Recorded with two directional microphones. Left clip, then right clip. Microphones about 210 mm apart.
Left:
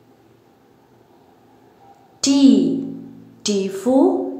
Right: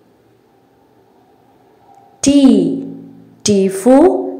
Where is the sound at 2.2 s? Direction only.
20° right (ahead or behind).